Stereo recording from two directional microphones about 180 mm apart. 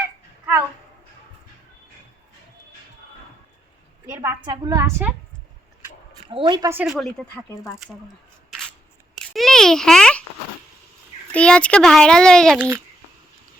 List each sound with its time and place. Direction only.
4.1 s a woman's voice: 10° right (ahead or behind)
6.3 s speech: 25° right (ahead or behind)
6.8 s a child's voice: centre (ahead or behind)
9.1 s a sound: centre (ahead or behind)
11.3 s a child's voice: 5° left (ahead or behind)
12.5 s a woman's voice: 10° right (ahead or behind)